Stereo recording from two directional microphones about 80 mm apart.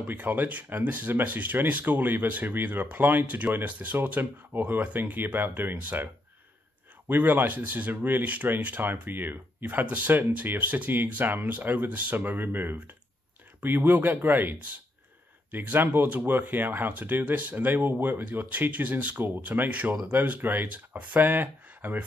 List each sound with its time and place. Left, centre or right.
0.0 s speech: right
7.1 s speech: right